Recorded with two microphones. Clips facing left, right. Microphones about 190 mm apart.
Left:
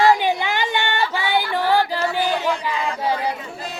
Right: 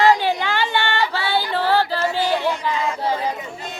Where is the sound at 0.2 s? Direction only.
15° left (ahead or behind).